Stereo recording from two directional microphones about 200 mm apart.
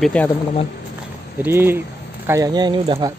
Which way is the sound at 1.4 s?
10° right (ahead or behind).